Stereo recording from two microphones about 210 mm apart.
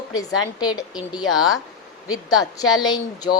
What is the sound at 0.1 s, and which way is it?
Speech, 15° left (ahead or behind).